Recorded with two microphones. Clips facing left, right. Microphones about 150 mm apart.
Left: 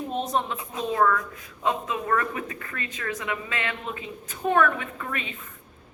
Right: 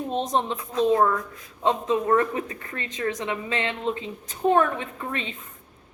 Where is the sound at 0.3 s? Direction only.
30° right (ahead or behind).